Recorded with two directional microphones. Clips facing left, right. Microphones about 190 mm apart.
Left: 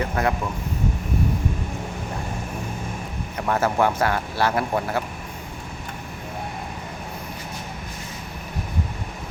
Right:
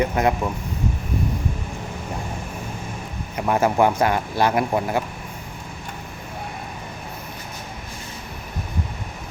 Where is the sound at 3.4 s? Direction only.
15° right (ahead or behind).